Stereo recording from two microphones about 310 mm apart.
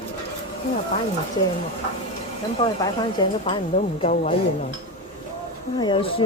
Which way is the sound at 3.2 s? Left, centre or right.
Centre.